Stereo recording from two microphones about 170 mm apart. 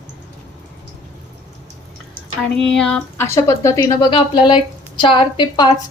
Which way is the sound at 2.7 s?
5° left (ahead or behind).